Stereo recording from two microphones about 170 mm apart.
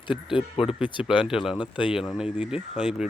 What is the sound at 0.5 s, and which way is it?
Speech, 30° left (ahead or behind).